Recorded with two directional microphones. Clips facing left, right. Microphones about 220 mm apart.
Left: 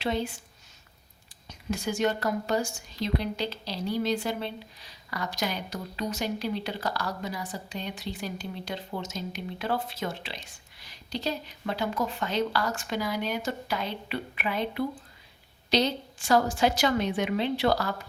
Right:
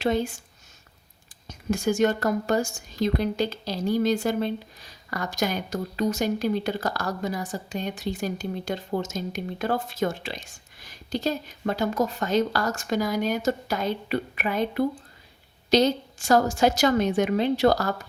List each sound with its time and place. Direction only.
0.0 s a woman's voice: 45° right (ahead or behind)
1.5 s a woman's voice: 45° right (ahead or behind)